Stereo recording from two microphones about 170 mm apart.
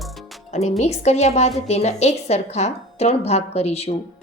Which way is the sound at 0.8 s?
40° left (ahead or behind).